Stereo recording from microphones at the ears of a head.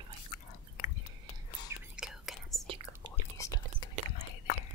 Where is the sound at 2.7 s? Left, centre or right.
Right.